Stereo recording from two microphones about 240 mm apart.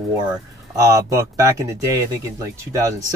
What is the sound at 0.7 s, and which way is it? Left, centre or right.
Speech, centre.